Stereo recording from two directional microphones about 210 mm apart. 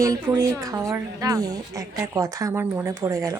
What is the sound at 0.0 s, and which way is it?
Speech, 15° right (ahead or behind).